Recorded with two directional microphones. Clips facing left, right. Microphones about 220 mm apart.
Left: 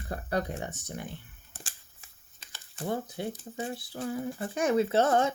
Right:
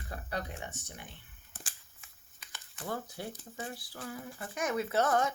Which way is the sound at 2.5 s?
30° left (ahead or behind).